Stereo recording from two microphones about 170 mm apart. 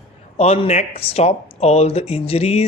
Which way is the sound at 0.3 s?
40° left (ahead or behind).